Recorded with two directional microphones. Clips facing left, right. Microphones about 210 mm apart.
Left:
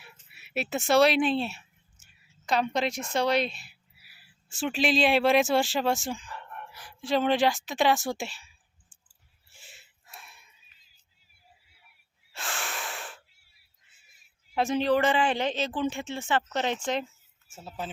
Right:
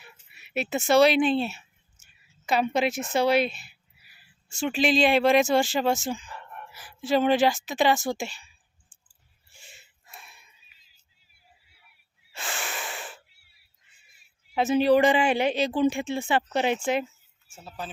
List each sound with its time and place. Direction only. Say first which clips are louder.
0.0 s a sound: right 1 dB; 5° left (ahead or behind)
2.5 s speech: right 3 dB; 5° right (ahead or behind)
9.5 s a sound: right 2 dB; centre (ahead or behind)
12.3 s wheeze: right 1 dB; centre (ahead or behind)
14.5 s speech: right 4 dB; 5° right (ahead or behind)
17.6 s speech: left 1 dB; 20° left (ahead or behind)